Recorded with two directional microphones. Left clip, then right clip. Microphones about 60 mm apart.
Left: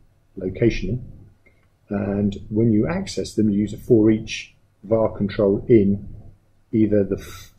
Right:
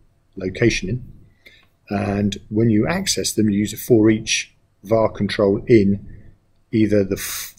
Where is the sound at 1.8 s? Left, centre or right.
Right.